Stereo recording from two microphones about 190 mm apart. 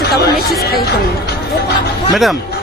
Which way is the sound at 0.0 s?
55° left (ahead or behind).